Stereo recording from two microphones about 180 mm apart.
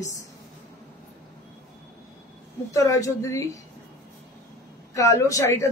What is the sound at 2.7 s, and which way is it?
Speech, 20° left (ahead or behind).